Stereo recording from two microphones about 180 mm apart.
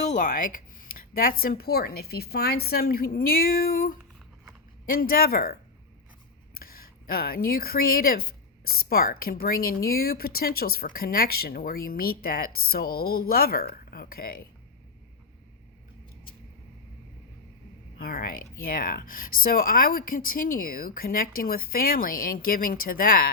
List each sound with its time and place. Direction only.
0.0 s a woman's voice: 45° left (ahead or behind)
6.6 s a woman's voice: 55° left (ahead or behind)
17.9 s speech: 55° left (ahead or behind)